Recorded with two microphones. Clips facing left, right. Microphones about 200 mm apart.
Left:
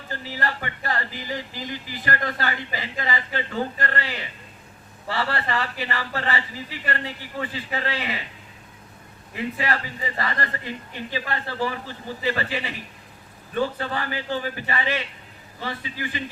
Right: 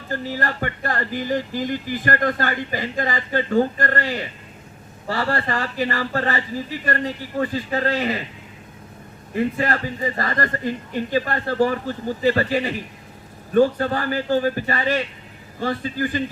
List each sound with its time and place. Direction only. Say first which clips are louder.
0.1 s speech: right 4 dB; 45° right (ahead or behind)
9.3 s speech: right 5 dB; 50° right (ahead or behind)